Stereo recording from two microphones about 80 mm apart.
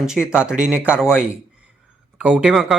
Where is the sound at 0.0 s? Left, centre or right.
Centre.